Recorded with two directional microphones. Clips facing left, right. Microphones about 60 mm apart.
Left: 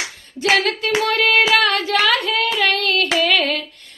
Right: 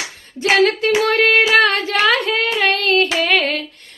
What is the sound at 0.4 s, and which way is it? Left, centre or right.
Female singing, right.